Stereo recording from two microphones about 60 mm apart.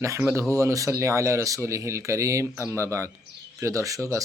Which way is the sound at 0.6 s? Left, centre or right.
Right.